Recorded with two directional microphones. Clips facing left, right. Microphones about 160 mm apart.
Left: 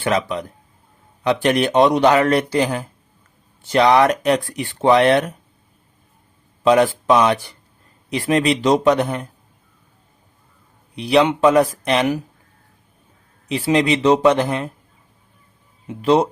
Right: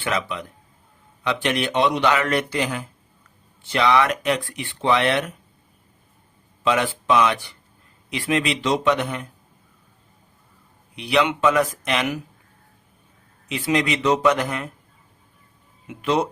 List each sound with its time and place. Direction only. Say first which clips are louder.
0.0 s speech: left 6 dB; 40° left (ahead or behind)
6.6 s speech: left 7 dB; 40° left (ahead or behind)
10.9 s speech: left 5 dB; 35° left (ahead or behind)
13.5 s speech: left 5 dB; 30° left (ahead or behind)
15.9 s speech: left 6 dB; 35° left (ahead or behind)